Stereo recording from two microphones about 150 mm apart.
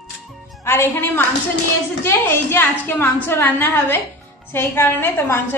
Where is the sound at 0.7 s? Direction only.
15° left (ahead or behind).